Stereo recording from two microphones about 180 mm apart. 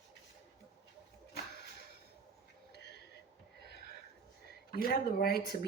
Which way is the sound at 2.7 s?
75° left (ahead or behind).